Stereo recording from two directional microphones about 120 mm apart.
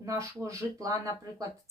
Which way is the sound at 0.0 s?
25° right (ahead or behind).